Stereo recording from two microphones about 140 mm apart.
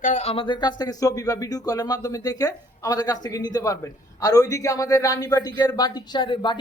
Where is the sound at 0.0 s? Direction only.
55° left (ahead or behind).